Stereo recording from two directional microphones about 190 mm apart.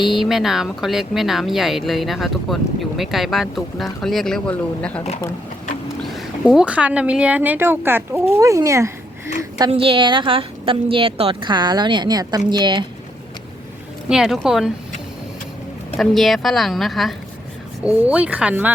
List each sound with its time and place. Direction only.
0.0 s speech: centre (ahead or behind)
8.4 s a sound: 15° right (ahead or behind)
9.6 s speech: 30° right (ahead or behind)
14.1 s speech: centre (ahead or behind)
16.0 s speech: centre (ahead or behind)